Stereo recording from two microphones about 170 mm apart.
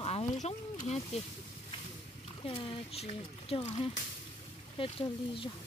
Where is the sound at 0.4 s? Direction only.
40° left (ahead or behind).